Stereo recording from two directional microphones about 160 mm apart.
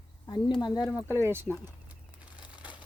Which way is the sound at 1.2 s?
15° right (ahead or behind).